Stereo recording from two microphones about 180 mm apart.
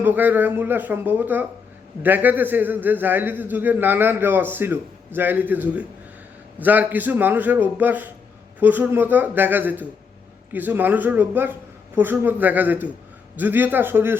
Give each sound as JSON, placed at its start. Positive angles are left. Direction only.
{"t": 0.0, "sound": "a man's voice", "side_deg": -10}